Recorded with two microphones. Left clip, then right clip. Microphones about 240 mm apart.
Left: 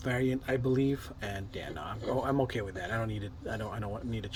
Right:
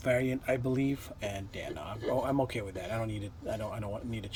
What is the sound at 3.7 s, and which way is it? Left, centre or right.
Speech, right.